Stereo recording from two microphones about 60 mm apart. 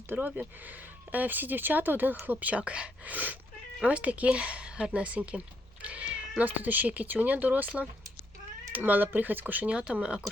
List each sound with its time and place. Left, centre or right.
0.1 s speech: right
9.7 s speech: centre